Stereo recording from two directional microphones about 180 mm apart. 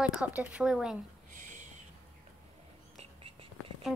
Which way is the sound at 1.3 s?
45° right (ahead or behind).